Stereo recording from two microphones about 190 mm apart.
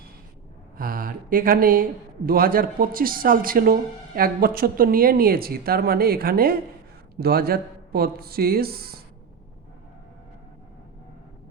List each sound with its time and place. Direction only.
0.8 s a man's voice: 50° right (ahead or behind)